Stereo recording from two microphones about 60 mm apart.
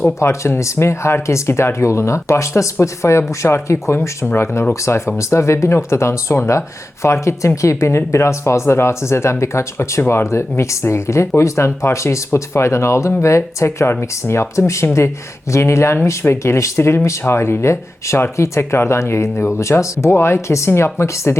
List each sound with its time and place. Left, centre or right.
0.2 s speech: left